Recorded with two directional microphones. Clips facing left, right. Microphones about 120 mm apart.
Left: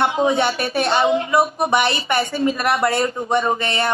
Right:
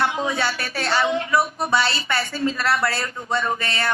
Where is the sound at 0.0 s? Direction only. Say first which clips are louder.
Left 5 dB; 25° left (ahead or behind).